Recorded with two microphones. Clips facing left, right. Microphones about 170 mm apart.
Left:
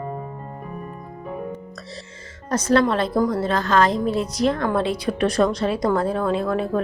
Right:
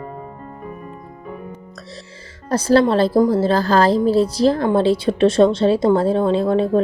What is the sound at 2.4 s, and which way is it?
Speech, 30° right (ahead or behind).